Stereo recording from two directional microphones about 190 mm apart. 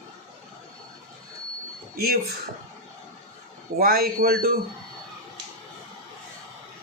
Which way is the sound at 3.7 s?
55° right (ahead or behind).